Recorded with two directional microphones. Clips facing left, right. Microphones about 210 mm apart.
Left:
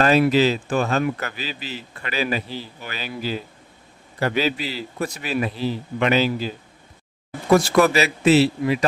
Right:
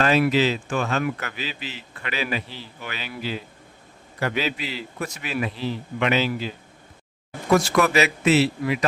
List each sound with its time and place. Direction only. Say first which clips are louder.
0.0 s speech: left 3 dB; 40° left (ahead or behind)
7.5 s speech: left 3 dB; 35° left (ahead or behind)